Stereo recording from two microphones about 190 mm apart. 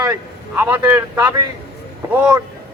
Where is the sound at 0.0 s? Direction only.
15° right (ahead or behind).